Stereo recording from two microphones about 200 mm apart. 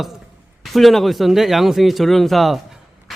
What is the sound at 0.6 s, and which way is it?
A man's voice, centre (ahead or behind).